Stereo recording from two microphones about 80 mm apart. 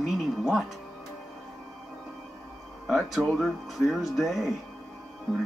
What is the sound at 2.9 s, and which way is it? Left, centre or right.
Speech, centre.